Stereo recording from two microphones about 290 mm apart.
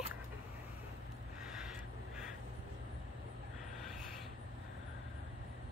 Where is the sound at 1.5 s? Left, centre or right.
Centre.